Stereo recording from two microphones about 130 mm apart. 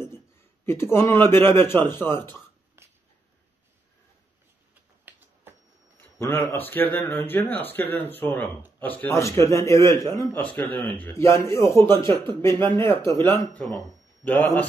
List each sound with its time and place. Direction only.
0.7 s speech: 20° left (ahead or behind)
2.8 s a sound: 20° right (ahead or behind)
5.9 s a man's voice: 15° left (ahead or behind)
10.4 s a man's voice: 10° left (ahead or behind)